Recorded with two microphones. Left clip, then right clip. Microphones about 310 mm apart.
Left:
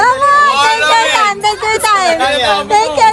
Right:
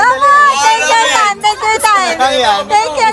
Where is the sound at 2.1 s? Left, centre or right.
Right.